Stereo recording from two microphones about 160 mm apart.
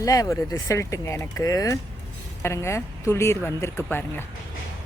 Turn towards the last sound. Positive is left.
turn(degrees=15)  # may be behind; listen again after turning